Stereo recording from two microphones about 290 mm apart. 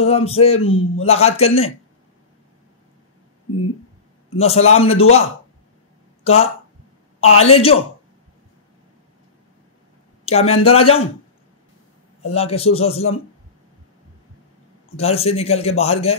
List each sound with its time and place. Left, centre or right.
0.0 s a man's voice: left
4.4 s a man's voice: left
6.2 s a man's voice: left
10.2 s a man's voice: left
12.3 s a man's voice: left
15.0 s a man's voice: left